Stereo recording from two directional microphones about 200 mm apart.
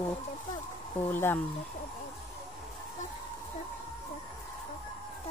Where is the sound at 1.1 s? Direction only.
10° left (ahead or behind).